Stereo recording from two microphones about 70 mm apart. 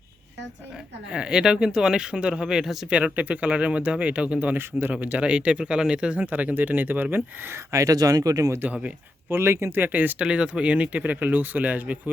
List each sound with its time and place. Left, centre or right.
1.1 s speech: centre
3.0 s speech: centre
4.5 s speech: right
7.7 s speech: right
8.5 s speech: right
9.3 s speech: right